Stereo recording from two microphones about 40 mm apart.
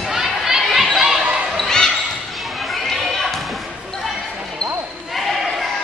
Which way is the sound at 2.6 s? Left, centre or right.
Centre.